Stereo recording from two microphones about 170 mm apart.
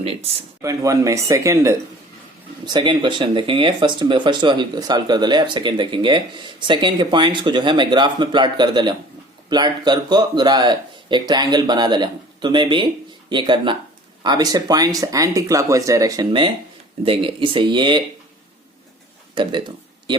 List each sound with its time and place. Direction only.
0.0 s speech: 35° right (ahead or behind)
0.6 s speech: 20° right (ahead or behind)
19.3 s speech: 30° right (ahead or behind)